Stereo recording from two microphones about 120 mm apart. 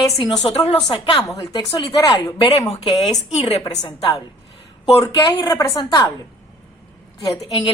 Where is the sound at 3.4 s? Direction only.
60° left (ahead or behind).